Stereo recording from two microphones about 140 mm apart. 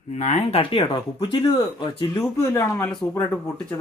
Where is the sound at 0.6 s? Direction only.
35° left (ahead or behind).